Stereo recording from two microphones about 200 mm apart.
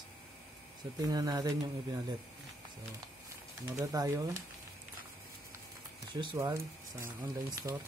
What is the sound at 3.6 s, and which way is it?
Speech, 15° right (ahead or behind).